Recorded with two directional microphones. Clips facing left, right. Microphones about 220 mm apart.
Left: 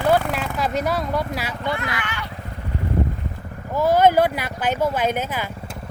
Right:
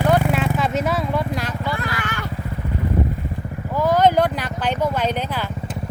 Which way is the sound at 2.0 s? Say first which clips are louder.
Right 3 dB; 45° right (ahead or behind).